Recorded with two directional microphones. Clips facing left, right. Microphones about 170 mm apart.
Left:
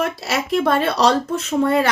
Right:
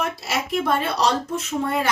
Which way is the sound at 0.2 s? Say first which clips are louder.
Left 4 dB; 75° left (ahead or behind).